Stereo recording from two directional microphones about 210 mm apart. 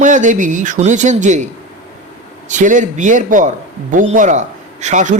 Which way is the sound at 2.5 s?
35° right (ahead or behind).